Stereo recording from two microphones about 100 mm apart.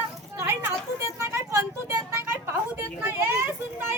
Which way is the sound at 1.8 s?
25° right (ahead or behind).